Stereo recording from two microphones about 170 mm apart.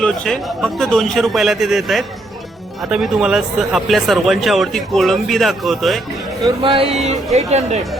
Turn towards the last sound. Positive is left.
turn(degrees=-40)  # may be behind; listen again after turning